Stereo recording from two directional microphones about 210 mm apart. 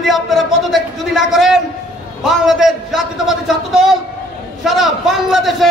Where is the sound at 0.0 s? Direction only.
Centre (ahead or behind).